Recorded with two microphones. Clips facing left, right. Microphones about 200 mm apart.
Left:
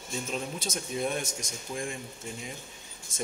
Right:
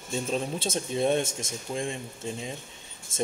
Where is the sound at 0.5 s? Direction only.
30° right (ahead or behind).